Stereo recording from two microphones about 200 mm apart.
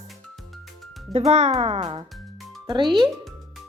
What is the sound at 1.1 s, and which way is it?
Speech, 35° right (ahead or behind).